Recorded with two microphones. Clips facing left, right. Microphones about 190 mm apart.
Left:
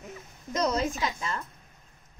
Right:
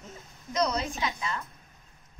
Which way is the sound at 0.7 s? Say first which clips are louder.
Left 3 dB; 45° left (ahead or behind).